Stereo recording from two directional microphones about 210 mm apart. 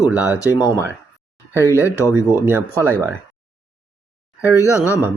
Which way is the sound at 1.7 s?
10° right (ahead or behind).